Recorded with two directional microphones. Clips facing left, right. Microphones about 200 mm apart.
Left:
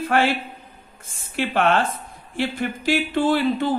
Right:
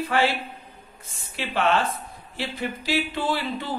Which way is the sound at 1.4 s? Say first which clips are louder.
Left 3 dB; 50° left (ahead or behind).